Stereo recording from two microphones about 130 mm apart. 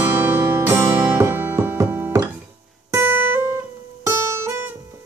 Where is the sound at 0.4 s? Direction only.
20° right (ahead or behind).